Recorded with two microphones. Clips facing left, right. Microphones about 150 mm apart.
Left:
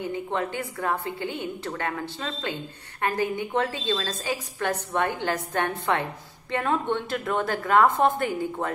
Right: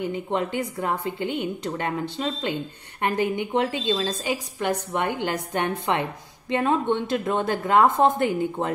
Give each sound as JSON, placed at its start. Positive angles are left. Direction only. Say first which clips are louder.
{"t": 0.3, "sound": "a woman's voice", "louder": "right 3 dB", "side_deg": -20}